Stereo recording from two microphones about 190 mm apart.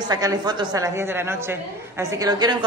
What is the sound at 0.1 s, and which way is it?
A woman's voice, 20° right (ahead or behind).